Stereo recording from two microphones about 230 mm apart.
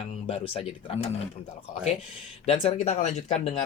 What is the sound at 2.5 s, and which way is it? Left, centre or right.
Speech, left.